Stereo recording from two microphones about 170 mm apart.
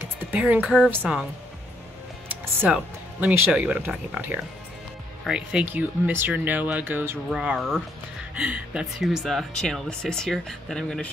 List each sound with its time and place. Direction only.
0.0 s speech: 10° right (ahead or behind)
2.2 s speech: 10° right (ahead or behind)